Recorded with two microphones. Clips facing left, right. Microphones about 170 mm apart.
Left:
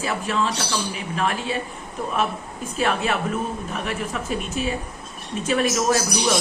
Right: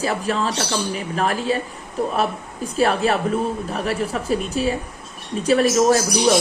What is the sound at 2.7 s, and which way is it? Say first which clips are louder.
A woman's voice: right 4 dB; 35° right (ahead or behind).